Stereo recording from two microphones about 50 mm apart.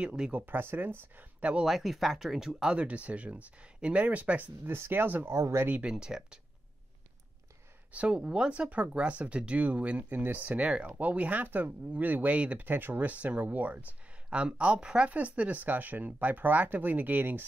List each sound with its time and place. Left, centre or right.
0.0 s speech: right
0.4 s speech: right
1.4 s speech: right
1.7 s speech: centre
2.7 s speech: right
4.7 s speech: right
5.3 s speech: right
5.8 s speech: centre
7.9 s speech: right